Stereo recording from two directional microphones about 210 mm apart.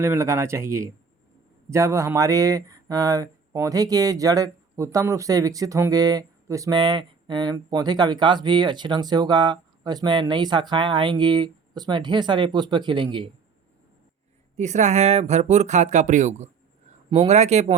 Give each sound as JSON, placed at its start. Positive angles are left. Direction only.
{"t": 0.0, "sound": "speech", "side_deg": -15}
{"t": 14.5, "sound": "speech", "side_deg": -35}